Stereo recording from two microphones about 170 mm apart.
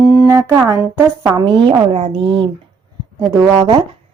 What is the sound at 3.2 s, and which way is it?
Speech, 20° right (ahead or behind).